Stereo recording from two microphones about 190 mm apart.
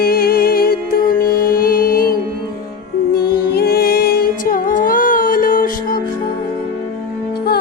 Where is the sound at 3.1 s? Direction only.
55° left (ahead or behind).